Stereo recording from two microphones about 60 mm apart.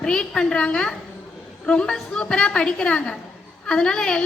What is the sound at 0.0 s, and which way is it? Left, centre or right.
A woman's voice, centre.